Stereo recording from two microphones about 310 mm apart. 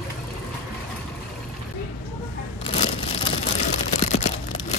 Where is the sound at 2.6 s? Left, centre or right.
Centre.